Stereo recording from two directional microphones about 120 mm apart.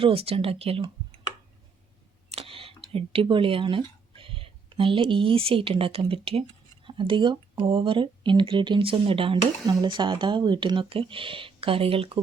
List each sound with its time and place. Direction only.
0.0 s speech: 50° right (ahead or behind)
2.3 s camera: 50° right (ahead or behind)
2.9 s speech: 50° right (ahead or behind)